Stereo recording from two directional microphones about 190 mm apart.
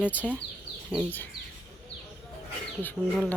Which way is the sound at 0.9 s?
5° left (ahead or behind).